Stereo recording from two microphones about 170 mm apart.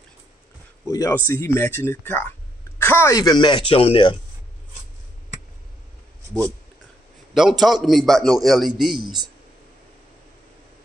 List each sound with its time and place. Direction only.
0.8 s speech: 15° left (ahead or behind); by 4.2 s 30° left (ahead or behind)
7.3 s a man's voice: centre (ahead or behind)